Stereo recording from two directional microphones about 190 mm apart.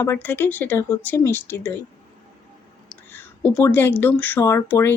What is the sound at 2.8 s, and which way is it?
Speech, 10° left (ahead or behind).